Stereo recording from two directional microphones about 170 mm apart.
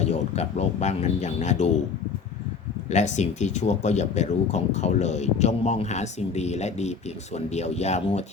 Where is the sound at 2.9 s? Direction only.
45° left (ahead or behind).